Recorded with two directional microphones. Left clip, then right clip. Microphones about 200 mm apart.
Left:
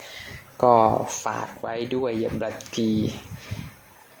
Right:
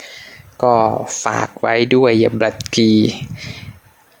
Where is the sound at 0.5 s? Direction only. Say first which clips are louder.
Right 4 dB; 15° right (ahead or behind).